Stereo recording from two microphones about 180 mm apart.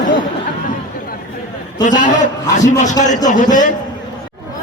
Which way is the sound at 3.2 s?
45° left (ahead or behind).